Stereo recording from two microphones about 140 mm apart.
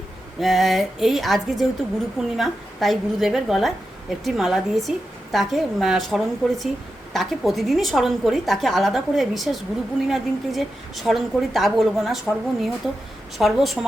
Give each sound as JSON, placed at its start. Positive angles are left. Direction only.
{"t": 0.3, "sound": "a woman's voice", "side_deg": 0}